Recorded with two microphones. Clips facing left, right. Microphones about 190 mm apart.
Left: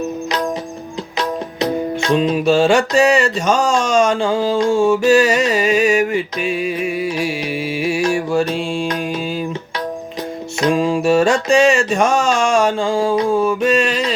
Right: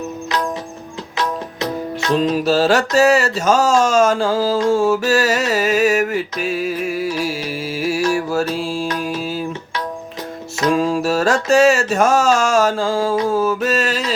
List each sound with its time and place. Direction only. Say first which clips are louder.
1.5 s music: left 4 dB; 15° left (ahead or behind)
2.1 s mantra: left 1 dB; centre (ahead or behind)
10.7 s mantra: left 2 dB; 5° right (ahead or behind)